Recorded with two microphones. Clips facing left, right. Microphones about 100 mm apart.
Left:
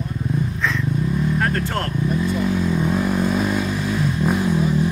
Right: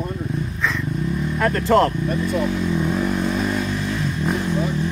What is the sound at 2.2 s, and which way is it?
Vehicle, centre (ahead or behind).